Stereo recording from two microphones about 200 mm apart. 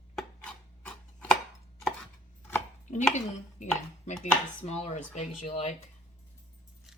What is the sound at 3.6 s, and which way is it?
Speech, 35° left (ahead or behind).